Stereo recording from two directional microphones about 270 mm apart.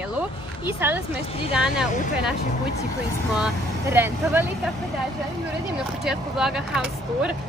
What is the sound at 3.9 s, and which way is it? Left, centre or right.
Speech, centre.